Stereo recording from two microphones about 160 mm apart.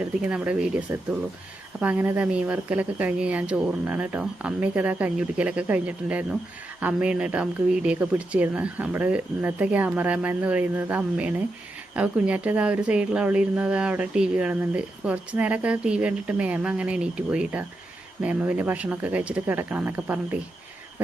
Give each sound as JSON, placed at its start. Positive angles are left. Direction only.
{"t": 0.3, "sound": "speech", "side_deg": -5}